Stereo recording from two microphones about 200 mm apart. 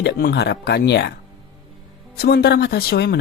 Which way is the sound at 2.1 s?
50° left (ahead or behind).